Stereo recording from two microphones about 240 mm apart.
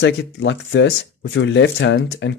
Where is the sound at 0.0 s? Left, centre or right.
Left.